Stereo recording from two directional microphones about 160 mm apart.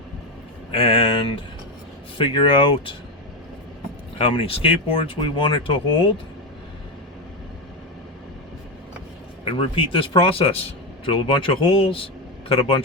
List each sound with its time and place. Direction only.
0.7 s speech: 35° left (ahead or behind)
4.2 s speech: 35° left (ahead or behind)
9.4 s speech: 35° left (ahead or behind)